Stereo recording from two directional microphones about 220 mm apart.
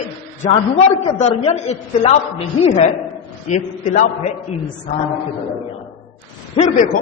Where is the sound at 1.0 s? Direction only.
30° left (ahead or behind).